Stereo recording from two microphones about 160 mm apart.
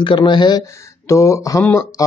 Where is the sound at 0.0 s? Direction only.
30° left (ahead or behind).